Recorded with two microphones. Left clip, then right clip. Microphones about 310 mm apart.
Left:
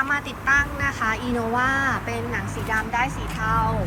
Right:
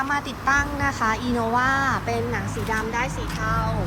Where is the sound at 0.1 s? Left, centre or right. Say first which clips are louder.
Left 1 dB; centre.